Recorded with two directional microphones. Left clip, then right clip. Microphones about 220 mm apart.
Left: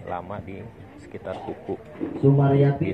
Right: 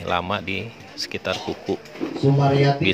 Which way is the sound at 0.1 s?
55° right (ahead or behind).